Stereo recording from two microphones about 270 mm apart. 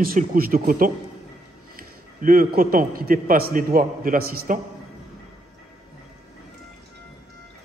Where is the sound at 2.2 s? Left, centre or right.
Right.